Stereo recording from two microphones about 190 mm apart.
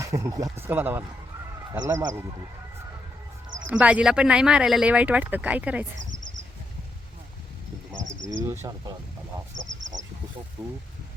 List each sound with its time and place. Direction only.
0.0 s speech: 15° right (ahead or behind)
3.7 s speech: 5° right (ahead or behind)
8.0 s cricket: 75° right (ahead or behind)
10.6 s speech: 10° right (ahead or behind)